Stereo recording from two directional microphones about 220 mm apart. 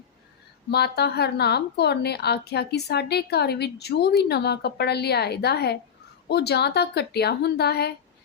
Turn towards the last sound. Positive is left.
turn(degrees=45)  # may be behind; listen again after turning